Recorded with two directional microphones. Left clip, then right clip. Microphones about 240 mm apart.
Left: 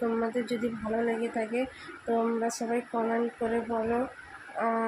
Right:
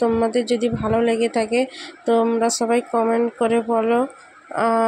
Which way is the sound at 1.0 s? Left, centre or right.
Right.